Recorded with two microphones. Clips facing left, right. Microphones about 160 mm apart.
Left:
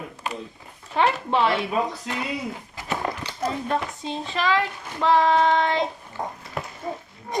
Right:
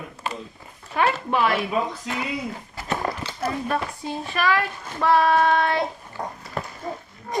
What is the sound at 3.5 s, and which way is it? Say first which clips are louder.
Speech: even; 20° left (ahead or behind).